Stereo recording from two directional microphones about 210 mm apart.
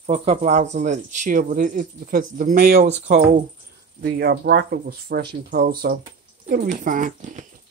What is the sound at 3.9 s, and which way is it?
Speech, 50° right (ahead or behind).